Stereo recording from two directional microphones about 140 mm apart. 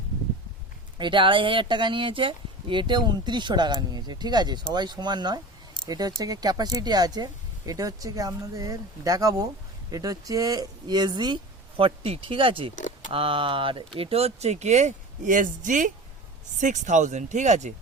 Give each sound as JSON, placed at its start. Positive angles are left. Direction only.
{"t": 0.9, "sound": "speech", "side_deg": -35}
{"t": 11.8, "sound": "speech", "side_deg": -40}
{"t": 12.7, "sound": "a sound", "side_deg": 65}
{"t": 13.1, "sound": "speech", "side_deg": -40}